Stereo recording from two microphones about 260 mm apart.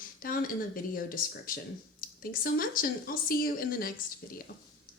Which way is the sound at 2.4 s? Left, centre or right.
Left.